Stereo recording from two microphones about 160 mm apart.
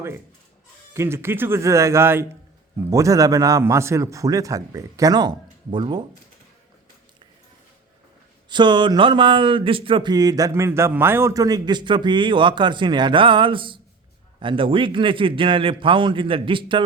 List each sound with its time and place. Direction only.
0.9 s a man's voice: 15° right (ahead or behind)
8.4 s a man's voice: 30° right (ahead or behind)